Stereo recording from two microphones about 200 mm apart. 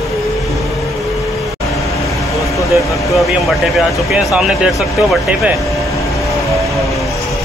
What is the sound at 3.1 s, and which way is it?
Speech, centre (ahead or behind).